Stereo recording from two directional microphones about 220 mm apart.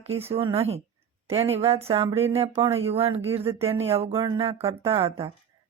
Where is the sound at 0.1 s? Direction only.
25° right (ahead or behind).